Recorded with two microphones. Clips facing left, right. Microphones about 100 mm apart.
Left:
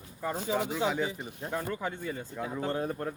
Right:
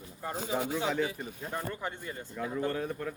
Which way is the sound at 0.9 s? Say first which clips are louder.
Even; 10° left (ahead or behind).